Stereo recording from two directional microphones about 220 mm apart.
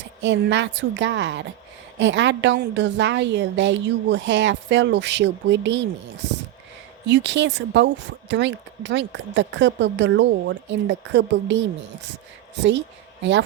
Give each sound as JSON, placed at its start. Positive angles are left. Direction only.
{"t": 0.0, "sound": "a woman's voice", "side_deg": -55}